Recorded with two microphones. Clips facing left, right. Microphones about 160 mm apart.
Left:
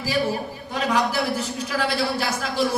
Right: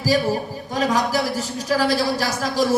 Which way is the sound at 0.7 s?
40° right (ahead or behind).